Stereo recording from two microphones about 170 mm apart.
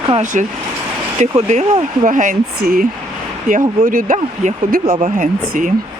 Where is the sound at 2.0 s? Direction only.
50° right (ahead or behind).